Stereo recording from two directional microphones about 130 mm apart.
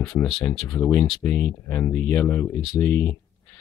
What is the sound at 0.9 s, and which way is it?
Speech, 10° left (ahead or behind).